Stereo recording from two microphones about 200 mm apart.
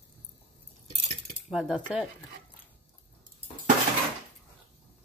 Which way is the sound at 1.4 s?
Centre (ahead or behind).